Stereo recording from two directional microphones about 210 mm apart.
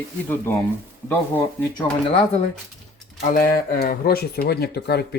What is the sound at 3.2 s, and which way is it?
Speech, 45° left (ahead or behind).